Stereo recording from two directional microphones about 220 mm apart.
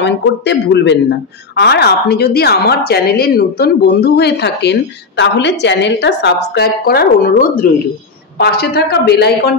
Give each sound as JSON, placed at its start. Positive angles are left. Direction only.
{"t": 0.0, "sound": "a woman's voice", "side_deg": 55}